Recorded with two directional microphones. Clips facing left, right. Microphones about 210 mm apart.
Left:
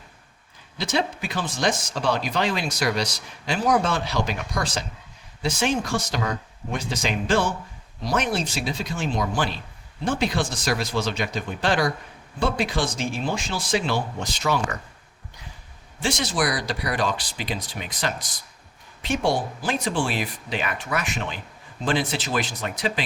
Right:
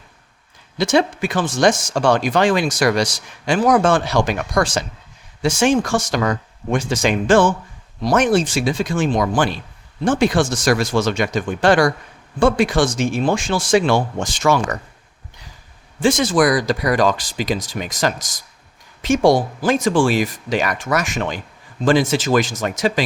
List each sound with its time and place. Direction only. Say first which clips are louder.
0.8 s speech: right 9 dB; 80° right
16.0 s speech: right 10 dB; 45° right (ahead or behind)
17.0 s speech: right 8 dB; 90° right